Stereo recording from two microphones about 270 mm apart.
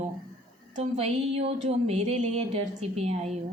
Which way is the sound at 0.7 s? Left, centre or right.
Right.